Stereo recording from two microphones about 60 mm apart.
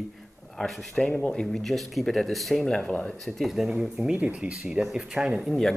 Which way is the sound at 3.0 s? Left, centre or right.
Centre.